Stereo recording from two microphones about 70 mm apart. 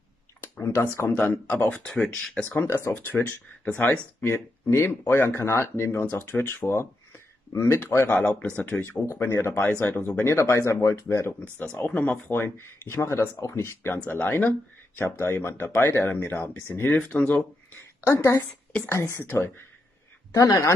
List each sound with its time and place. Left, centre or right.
0.7 s speech: left
1.1 s speech: left
2.8 s speech: left
4.3 s speech: left
8.5 s speech: centre
9.0 s speech: left
9.6 s speech: left
11.6 s speech: left
12.3 s speech: left
13.9 s speech: left
15.0 s speech: left
18.0 s speech: left
20.3 s speech: left